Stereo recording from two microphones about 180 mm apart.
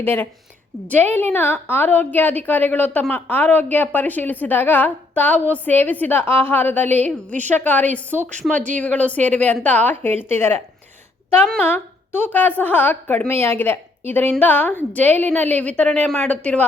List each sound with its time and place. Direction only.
0.0 s a woman's voice: 10° left (ahead or behind)
8.5 s speech: 45° right (ahead or behind)
8.8 s a woman's voice: 10° left (ahead or behind)